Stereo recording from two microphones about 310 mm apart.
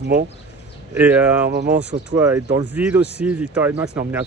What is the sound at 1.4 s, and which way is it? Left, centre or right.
Speech, right.